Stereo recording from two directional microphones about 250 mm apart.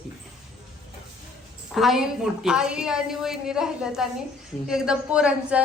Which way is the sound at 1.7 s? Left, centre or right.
Centre.